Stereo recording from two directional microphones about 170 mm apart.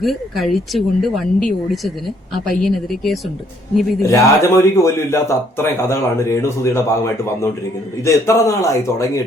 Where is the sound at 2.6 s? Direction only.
Centre (ahead or behind).